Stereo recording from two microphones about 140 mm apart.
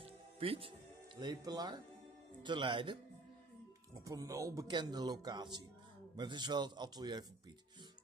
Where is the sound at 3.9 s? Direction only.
25° right (ahead or behind).